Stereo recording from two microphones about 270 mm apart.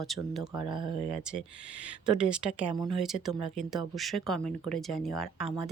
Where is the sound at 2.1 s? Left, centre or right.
Centre.